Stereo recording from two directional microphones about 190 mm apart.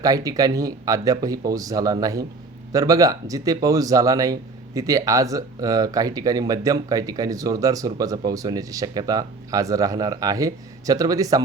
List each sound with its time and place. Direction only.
0.0 s speech: 20° right (ahead or behind)